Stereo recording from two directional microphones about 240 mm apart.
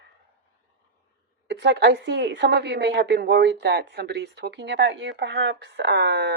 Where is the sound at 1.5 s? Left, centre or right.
Right.